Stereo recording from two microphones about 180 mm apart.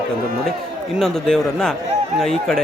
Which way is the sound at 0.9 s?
Centre (ahead or behind).